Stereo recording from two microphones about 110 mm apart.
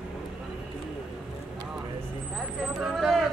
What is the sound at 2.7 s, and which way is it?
Speech, 5° right (ahead or behind).